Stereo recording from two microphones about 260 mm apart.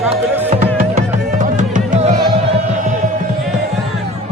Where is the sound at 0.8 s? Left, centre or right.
Right.